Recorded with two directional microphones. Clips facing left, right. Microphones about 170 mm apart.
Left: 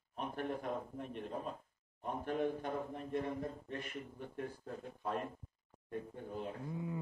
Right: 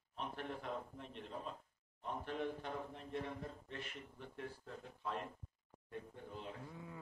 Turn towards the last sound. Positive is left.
turn(degrees=20)  # may be behind; listen again after turning